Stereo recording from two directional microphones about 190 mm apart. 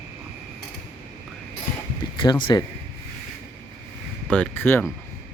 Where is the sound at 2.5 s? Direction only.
20° left (ahead or behind).